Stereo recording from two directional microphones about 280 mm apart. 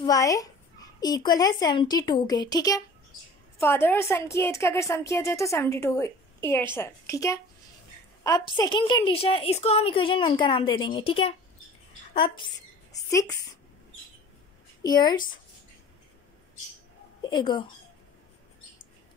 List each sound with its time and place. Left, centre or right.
0.0 s a child's voice: centre
14.8 s a woman's voice: centre
17.2 s speech: centre